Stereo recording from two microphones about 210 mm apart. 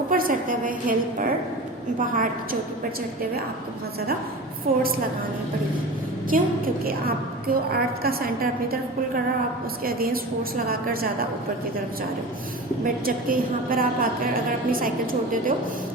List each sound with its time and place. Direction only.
0.1 s a woman's voice: 40° right (ahead or behind)
4.7 s a woman's voice: 40° right (ahead or behind)
6.3 s a woman's voice: 40° right (ahead or behind)
9.8 s a woman's voice: 45° right (ahead or behind)
12.8 s a woman's voice: 40° right (ahead or behind)